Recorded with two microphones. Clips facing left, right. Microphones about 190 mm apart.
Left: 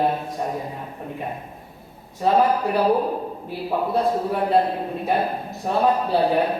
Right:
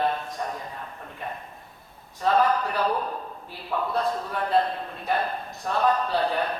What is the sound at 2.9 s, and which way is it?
Speech, 30° left (ahead or behind).